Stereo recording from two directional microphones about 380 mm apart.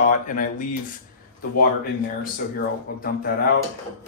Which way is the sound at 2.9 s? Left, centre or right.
Left.